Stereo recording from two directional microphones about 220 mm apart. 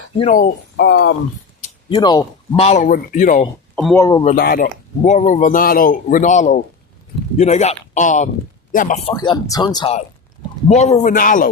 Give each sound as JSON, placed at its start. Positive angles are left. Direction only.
{"t": 0.2, "sound": "a man's voice", "side_deg": 35}
{"t": 0.8, "sound": "speech", "side_deg": 55}
{"t": 1.9, "sound": "a man's voice", "side_deg": 20}
{"t": 3.9, "sound": "a man's voice", "side_deg": 15}
{"t": 4.4, "sound": "a man's voice", "side_deg": 45}
{"t": 9.1, "sound": "a man's voice", "side_deg": 20}